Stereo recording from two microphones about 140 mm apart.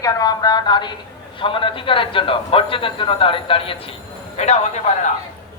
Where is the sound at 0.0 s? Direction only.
25° left (ahead or behind); by 3.9 s 40° left (ahead or behind).